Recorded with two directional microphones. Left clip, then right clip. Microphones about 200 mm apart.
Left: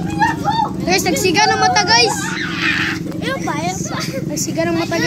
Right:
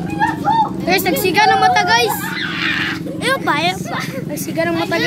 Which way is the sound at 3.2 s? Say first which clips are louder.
Right 7 dB; 60° right (ahead or behind).